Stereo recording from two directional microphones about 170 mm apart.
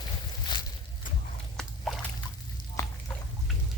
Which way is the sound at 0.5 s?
25° left (ahead or behind).